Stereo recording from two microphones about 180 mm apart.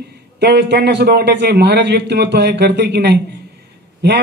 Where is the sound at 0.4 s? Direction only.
70° right (ahead or behind).